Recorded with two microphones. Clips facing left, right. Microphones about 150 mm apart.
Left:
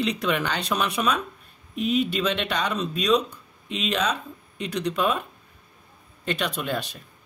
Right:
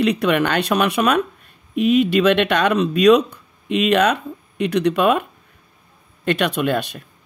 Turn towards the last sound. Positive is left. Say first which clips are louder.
# right 8 dB
turn(degrees=-65)  # may be behind; listen again after turning